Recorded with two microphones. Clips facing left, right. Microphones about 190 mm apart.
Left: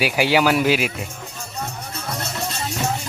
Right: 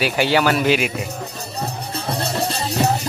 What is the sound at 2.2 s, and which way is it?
Music, 35° right (ahead or behind).